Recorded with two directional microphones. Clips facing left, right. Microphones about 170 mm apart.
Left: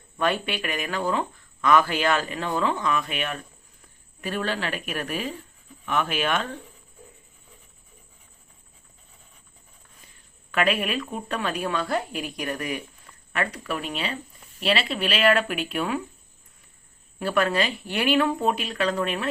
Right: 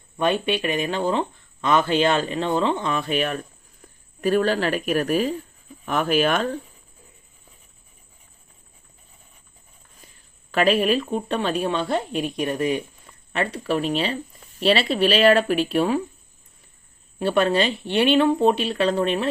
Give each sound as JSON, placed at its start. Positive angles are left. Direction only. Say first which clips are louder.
{"t": 0.2, "sound": "speech", "louder": "right 4 dB", "side_deg": -20}
{"t": 10.5, "sound": "speech", "louder": "right 5 dB", "side_deg": -35}
{"t": 17.2, "sound": "speech", "louder": "right 4 dB", "side_deg": -25}